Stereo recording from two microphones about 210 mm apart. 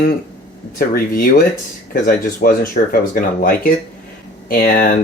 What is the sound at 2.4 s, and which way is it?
Speech, 40° left (ahead or behind).